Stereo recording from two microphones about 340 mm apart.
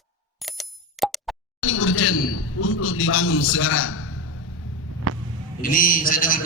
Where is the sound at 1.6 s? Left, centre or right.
Left.